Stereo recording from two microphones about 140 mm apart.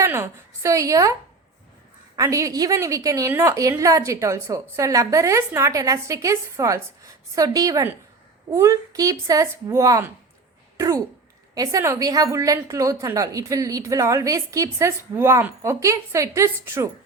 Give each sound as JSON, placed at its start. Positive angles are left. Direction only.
{"t": 0.0, "sound": "a woman's voice", "side_deg": -20}
{"t": 2.1, "sound": "a woman's voice", "side_deg": -25}